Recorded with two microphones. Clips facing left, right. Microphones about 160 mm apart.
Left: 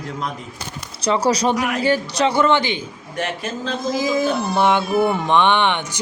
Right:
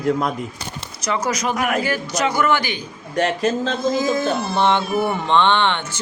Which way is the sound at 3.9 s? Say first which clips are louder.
Left 4 dB; 10° left (ahead or behind).